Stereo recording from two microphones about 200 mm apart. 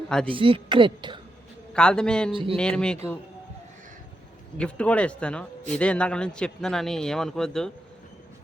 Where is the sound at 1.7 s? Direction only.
5° left (ahead or behind).